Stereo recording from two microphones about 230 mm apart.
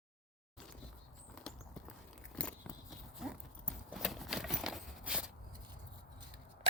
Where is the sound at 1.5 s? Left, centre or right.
Centre.